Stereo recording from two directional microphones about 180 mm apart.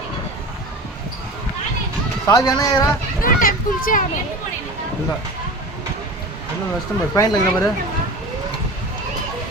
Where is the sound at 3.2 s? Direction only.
50° left (ahead or behind).